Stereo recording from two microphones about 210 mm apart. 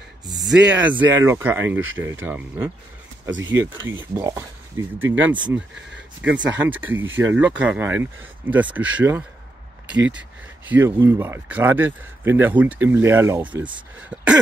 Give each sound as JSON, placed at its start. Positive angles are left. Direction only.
{"t": 0.5, "sound": "speech", "side_deg": -5}
{"t": 1.8, "sound": "speech", "side_deg": -70}
{"t": 2.0, "sound": "speech", "side_deg": -10}
{"t": 3.3, "sound": "speech", "side_deg": -65}
{"t": 3.9, "sound": "speech", "side_deg": -15}
{"t": 6.9, "sound": "speech", "side_deg": -65}
{"t": 7.3, "sound": "speech", "side_deg": -5}
{"t": 10.7, "sound": "speech", "side_deg": -10}
{"t": 14.1, "sound": "cough", "side_deg": -5}